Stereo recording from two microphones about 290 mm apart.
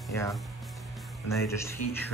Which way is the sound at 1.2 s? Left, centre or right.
Centre.